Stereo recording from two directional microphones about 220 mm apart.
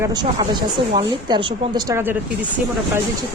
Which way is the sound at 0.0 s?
20° right (ahead or behind).